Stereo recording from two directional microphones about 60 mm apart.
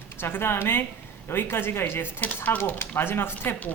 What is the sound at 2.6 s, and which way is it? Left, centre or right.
Speech, left.